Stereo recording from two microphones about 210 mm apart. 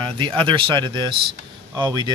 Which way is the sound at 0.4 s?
25° right (ahead or behind).